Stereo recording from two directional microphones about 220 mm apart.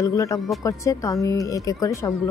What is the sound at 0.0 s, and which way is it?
Speech, 15° left (ahead or behind).